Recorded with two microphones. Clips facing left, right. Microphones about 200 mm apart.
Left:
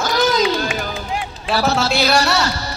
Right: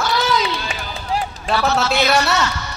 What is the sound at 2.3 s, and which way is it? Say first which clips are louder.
Music: left 1 dB; 35° left (ahead or behind).